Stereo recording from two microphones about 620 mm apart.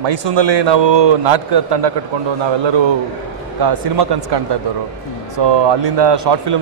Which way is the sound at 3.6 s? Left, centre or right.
Right.